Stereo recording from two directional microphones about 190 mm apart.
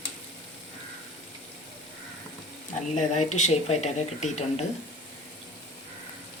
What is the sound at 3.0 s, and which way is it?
Speech, 40° left (ahead or behind).